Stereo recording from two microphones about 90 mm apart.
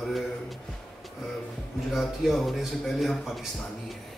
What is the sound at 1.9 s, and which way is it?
Speech, centre (ahead or behind).